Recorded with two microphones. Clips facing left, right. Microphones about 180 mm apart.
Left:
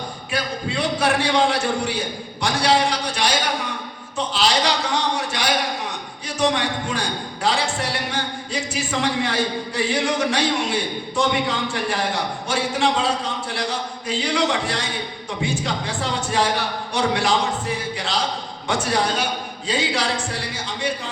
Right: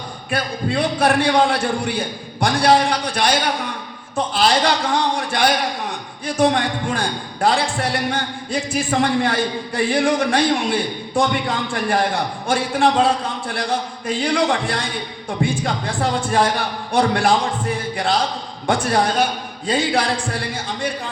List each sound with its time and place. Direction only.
0.3 s a man's voice: 55° right (ahead or behind)
4.4 s a man's voice: 55° right (ahead or behind)